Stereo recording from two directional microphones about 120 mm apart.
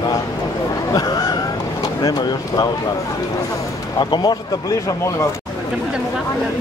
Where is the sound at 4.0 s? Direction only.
40° left (ahead or behind).